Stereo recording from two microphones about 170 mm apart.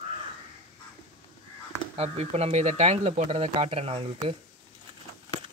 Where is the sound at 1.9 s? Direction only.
40° right (ahead or behind).